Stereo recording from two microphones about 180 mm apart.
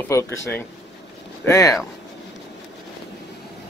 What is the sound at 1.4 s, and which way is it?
Speech, 15° left (ahead or behind).